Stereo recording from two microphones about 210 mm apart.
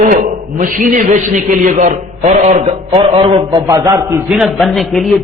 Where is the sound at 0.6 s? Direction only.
40° right (ahead or behind).